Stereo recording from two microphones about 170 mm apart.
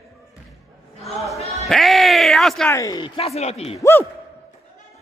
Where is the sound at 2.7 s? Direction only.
20° left (ahead or behind); by 3.8 s 35° left (ahead or behind).